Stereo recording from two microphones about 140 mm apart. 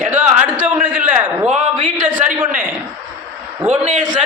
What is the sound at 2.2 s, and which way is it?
Speech, 70° right (ahead or behind).